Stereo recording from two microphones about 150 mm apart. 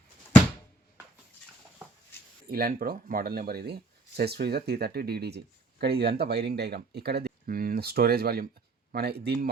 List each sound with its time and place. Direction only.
2.5 s speech: 85° right